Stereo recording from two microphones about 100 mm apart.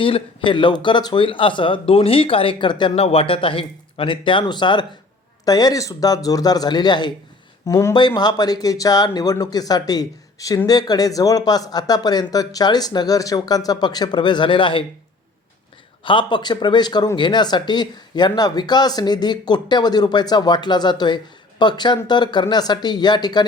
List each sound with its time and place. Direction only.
0.0 s speech: 60° left (ahead or behind)
2.9 s speech: 85° left; by 4.9 s 50° left (ahead or behind)
5.5 s speech: 40° left (ahead or behind)
7.7 s speech: 30° left (ahead or behind)
7.9 s speech: 45° left (ahead or behind)
16.0 s speech: 55° left (ahead or behind)